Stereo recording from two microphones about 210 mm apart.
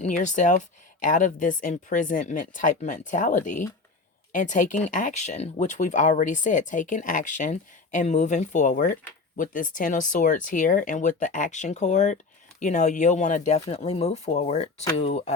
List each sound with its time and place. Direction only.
0.0 s speech: 35° left (ahead or behind)